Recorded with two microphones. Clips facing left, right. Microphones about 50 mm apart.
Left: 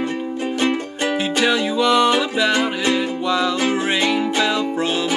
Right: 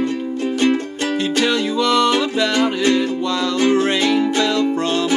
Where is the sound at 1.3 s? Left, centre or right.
Centre.